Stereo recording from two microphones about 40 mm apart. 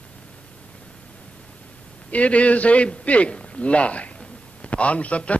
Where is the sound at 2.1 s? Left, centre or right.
Left.